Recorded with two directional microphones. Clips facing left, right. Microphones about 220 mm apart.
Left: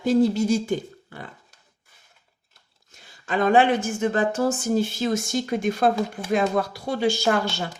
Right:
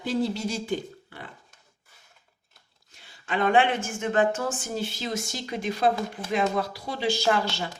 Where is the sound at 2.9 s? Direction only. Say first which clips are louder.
Left 3 dB; 40° left (ahead or behind).